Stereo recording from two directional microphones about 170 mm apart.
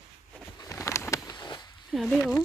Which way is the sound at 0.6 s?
20° left (ahead or behind).